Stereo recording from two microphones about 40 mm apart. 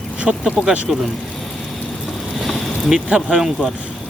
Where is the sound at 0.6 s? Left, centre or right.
Centre.